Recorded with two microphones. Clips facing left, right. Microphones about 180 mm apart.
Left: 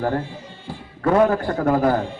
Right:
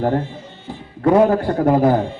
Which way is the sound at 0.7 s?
20° right (ahead or behind).